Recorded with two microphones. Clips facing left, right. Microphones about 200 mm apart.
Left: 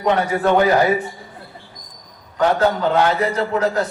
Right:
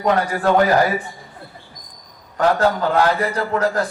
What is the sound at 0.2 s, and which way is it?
Speech, 25° left (ahead or behind).